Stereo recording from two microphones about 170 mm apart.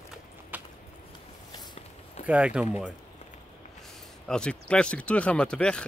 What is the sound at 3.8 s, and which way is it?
Speech, centre (ahead or behind).